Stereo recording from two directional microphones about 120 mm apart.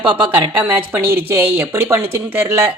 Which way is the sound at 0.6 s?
15° right (ahead or behind).